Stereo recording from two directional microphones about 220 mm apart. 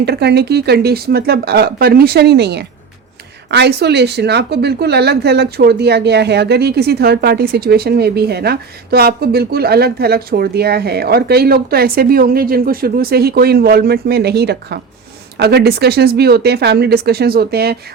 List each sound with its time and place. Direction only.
0.0 s speech: 50° right (ahead or behind)